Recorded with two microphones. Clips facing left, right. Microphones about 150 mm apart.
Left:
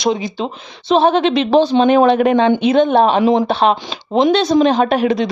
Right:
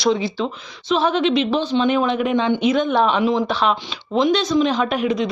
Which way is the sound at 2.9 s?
55° left (ahead or behind).